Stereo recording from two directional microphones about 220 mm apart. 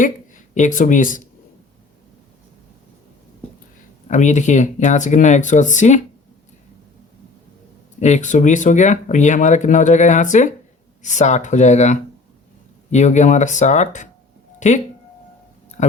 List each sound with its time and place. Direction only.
0.0 s speech: 35° left (ahead or behind)
4.1 s speech: 35° left (ahead or behind)
8.0 s speech: 35° left (ahead or behind)
15.8 s a sound: 35° left (ahead or behind)